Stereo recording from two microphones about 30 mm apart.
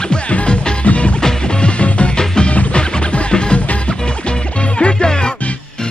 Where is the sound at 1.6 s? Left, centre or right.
Left.